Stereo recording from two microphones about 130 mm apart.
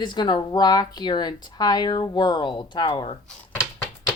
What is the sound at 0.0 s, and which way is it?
Speech, 35° left (ahead or behind).